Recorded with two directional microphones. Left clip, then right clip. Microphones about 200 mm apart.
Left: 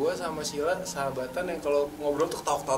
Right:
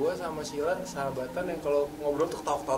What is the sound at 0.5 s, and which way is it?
Speech, 15° right (ahead or behind).